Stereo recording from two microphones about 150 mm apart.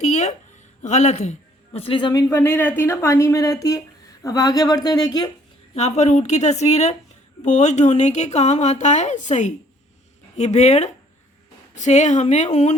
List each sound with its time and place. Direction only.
0.0 s a sound: 50° left (ahead or behind)
0.8 s a man's voice: 50° left (ahead or behind); by 2.2 s 30° left (ahead or behind)
2.3 s speech: 15° left (ahead or behind)
5.7 s speech: 45° left (ahead or behind)